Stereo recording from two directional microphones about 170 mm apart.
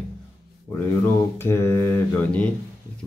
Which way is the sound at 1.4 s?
15° left (ahead or behind).